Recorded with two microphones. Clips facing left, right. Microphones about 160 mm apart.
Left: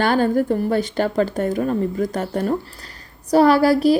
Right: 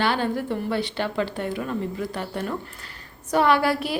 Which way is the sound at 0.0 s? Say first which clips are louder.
Left 7 dB; 45° left (ahead or behind).